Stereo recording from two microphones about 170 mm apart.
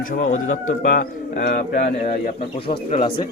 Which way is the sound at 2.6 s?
30° left (ahead or behind).